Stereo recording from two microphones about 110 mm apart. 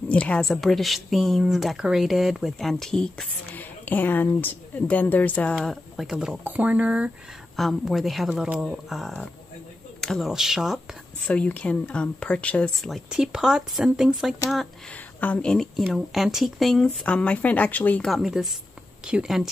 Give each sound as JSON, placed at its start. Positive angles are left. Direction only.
{"t": 0.1, "sound": "speech", "side_deg": 10}
{"t": 3.5, "sound": "speech", "side_deg": 15}
{"t": 5.6, "sound": "speech", "side_deg": 0}
{"t": 7.5, "sound": "speech", "side_deg": 0}
{"t": 11.2, "sound": "speech", "side_deg": 15}
{"t": 13.1, "sound": "speech", "side_deg": -5}
{"t": 15.1, "sound": "speech", "side_deg": 15}
{"t": 15.5, "sound": "speech", "side_deg": 5}
{"t": 18.0, "sound": "speech", "side_deg": 0}